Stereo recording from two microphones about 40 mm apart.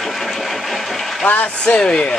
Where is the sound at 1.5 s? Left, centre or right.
Centre.